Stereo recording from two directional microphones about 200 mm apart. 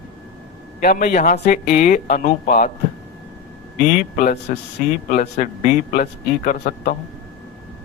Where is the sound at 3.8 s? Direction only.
40° left (ahead or behind).